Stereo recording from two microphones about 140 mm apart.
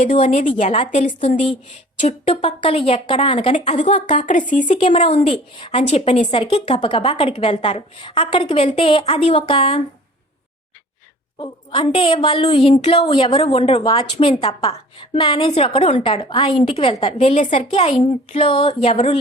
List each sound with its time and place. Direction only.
0.0 s a woman's voice: 65° left (ahead or behind)
2.0 s a woman's voice: 45° left (ahead or behind)
3.5 s a woman's voice: 55° left (ahead or behind)
4.7 s a woman's voice: 45° left (ahead or behind)
5.9 s a woman's voice: 50° left (ahead or behind)
11.3 s a woman's voice: 35° left (ahead or behind); by 17.9 s 55° left (ahead or behind)
18.3 s a woman's voice: 40° left (ahead or behind)